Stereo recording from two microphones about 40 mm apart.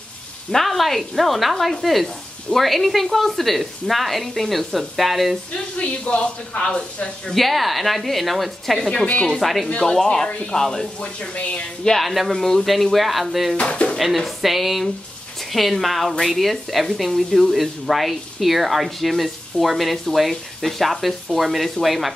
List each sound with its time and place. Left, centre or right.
0.5 s speech: centre
5.5 s speech: left
7.3 s speech: centre
9.9 s speech: centre
11.0 s speech: left
12.0 s speech: centre
13.6 s speech: left
13.9 s speech: centre